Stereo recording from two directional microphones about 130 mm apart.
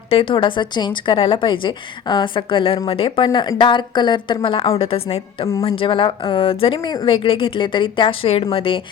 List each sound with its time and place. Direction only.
0.1 s a woman's voice: 40° left (ahead or behind)